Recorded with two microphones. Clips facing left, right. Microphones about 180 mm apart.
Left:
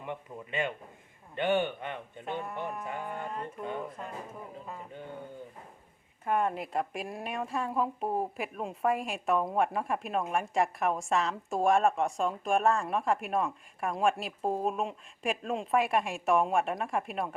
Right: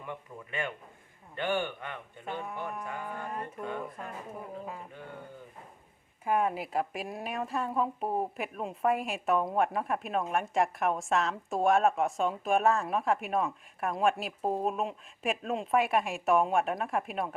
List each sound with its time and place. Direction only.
0.0 s speech: 20° left (ahead or behind)
2.4 s a woman's voice: centre (ahead or behind)
2.8 s speech: 20° left (ahead or behind)
6.2 s a woman's voice: 5° right (ahead or behind)